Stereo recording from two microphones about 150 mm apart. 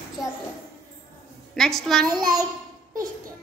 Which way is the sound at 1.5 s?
5° left (ahead or behind).